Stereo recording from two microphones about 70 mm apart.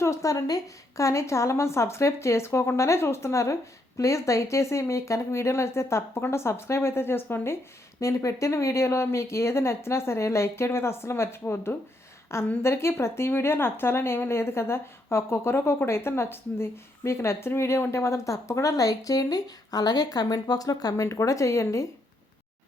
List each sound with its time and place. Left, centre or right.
0.0 s speech: left
20.9 s speech: left